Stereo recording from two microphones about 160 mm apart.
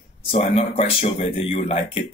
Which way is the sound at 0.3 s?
40° left (ahead or behind).